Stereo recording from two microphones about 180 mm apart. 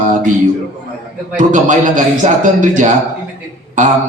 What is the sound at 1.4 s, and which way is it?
A man's voice, 45° right (ahead or behind).